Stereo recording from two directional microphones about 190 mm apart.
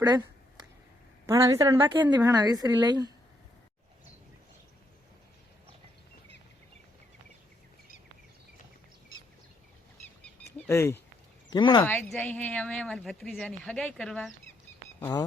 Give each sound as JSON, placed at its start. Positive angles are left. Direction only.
{"t": 0.0, "sound": "a sound", "side_deg": -20}
{"t": 1.3, "sound": "a woman's voice", "side_deg": -20}
{"t": 10.7, "sound": "speech", "side_deg": 15}
{"t": 11.5, "sound": "speech", "side_deg": 25}
{"t": 11.9, "sound": "a woman's voice", "side_deg": 10}